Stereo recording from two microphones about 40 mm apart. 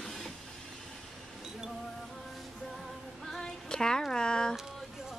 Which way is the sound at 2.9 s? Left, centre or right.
Centre.